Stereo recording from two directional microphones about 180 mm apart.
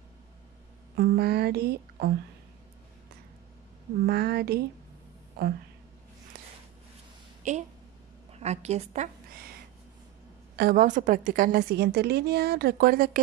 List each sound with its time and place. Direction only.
0.9 s speech: 60° right (ahead or behind)
4.0 s a woman's voice: 60° right (ahead or behind)
7.4 s a woman's voice: 40° right (ahead or behind)
10.5 s a woman's voice: 55° right (ahead or behind)